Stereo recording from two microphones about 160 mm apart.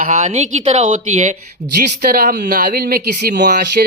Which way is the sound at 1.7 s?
70° right (ahead or behind).